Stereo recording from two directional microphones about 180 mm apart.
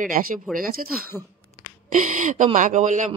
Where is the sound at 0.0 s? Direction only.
50° right (ahead or behind).